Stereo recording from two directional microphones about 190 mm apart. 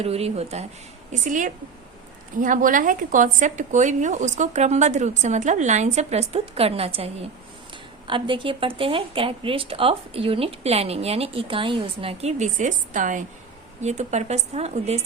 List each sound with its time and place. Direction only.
0.0 s a woman's voice: 35° right (ahead or behind)